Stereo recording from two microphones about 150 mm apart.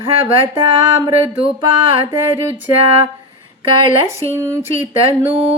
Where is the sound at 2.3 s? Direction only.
15° right (ahead or behind).